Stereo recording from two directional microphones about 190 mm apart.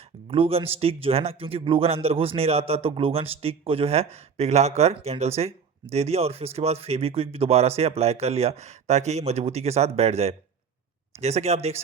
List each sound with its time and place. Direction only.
0.3 s a man's voice: 30° right (ahead or behind)